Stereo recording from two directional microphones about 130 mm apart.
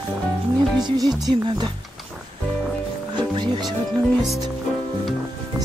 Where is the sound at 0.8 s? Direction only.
30° right (ahead or behind).